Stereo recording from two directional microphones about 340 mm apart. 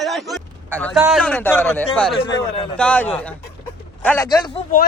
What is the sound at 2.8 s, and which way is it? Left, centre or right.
A man's voice, centre.